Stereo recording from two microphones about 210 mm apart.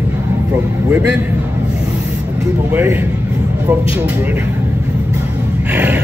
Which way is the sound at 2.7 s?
10° right (ahead or behind).